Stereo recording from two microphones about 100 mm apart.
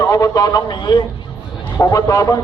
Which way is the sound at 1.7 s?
35° left (ahead or behind).